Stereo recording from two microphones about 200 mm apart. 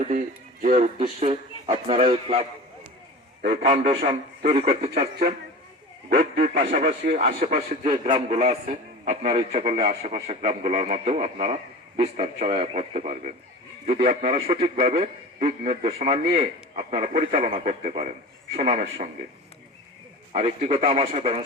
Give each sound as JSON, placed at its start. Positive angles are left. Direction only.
{"t": 0.1, "sound": "a man's voice", "side_deg": -40}
{"t": 3.5, "sound": "a man's voice", "side_deg": -30}
{"t": 6.1, "sound": "a man's voice", "side_deg": -50}
{"t": 6.5, "sound": "a man's voice", "side_deg": -35}
{"t": 14.8, "sound": "a man's voice", "side_deg": -40}
{"t": 20.3, "sound": "a man's voice", "side_deg": -30}